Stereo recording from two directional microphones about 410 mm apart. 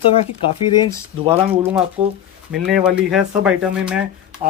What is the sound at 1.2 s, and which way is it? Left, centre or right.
Speech, centre.